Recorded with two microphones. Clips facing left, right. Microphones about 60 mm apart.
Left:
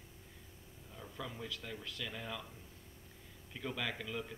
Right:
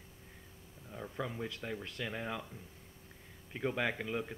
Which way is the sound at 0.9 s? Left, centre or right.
Right.